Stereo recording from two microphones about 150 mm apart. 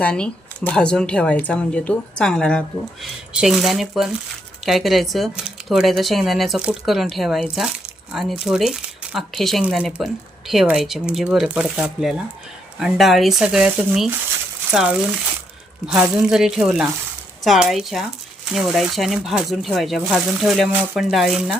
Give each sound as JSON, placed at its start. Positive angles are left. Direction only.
{"t": 0.0, "sound": "speech", "side_deg": 5}